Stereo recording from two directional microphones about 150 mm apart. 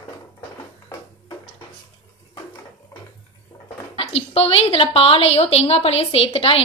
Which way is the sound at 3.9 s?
40° left (ahead or behind).